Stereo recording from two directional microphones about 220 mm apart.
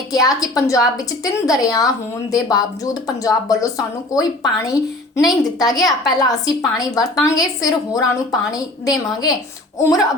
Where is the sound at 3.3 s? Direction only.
15° left (ahead or behind).